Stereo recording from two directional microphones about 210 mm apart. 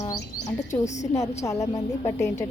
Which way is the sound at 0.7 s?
35° left (ahead or behind).